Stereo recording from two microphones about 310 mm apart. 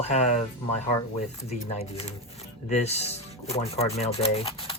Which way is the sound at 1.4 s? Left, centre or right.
Centre.